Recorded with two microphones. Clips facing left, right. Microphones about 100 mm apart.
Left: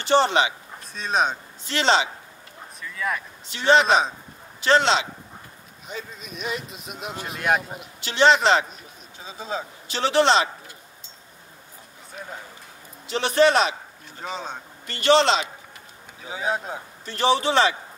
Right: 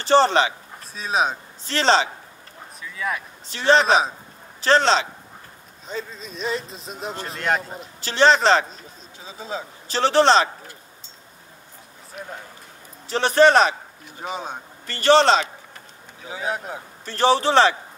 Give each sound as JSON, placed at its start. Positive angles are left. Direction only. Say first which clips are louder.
{"t": 0.0, "sound": "speech", "louder": "right 3 dB", "side_deg": -35}
{"t": 0.9, "sound": "speech", "louder": "right 1 dB", "side_deg": -5}
{"t": 1.6, "sound": "speech", "louder": "right 2 dB", "side_deg": -40}
{"t": 2.8, "sound": "speech", "louder": "even", "side_deg": 0}
{"t": 3.4, "sound": "speech", "louder": "right 1 dB", "side_deg": -35}
{"t": 6.1, "sound": "speech", "louder": "right 3 dB", "side_deg": -30}
{"t": 7.2, "sound": "speech", "louder": "left 1 dB", "side_deg": 10}
{"t": 7.8, "sound": "speech", "louder": "right 2 dB", "side_deg": -35}
{"t": 9.8, "sound": "speech", "louder": "right 3 dB", "side_deg": -40}
{"t": 13.1, "sound": "speech", "louder": "right 3 dB", "side_deg": -40}
{"t": 14.2, "sound": "speech", "louder": "right 2 dB", "side_deg": -15}
{"t": 14.9, "sound": "speech", "louder": "right 3 dB", "side_deg": -40}
{"t": 16.3, "sound": "speech", "louder": "left 1 dB", "side_deg": 20}
{"t": 17.0, "sound": "speech", "louder": "right 3 dB", "side_deg": -35}